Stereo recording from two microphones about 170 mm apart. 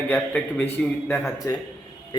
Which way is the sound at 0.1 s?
10° left (ahead or behind).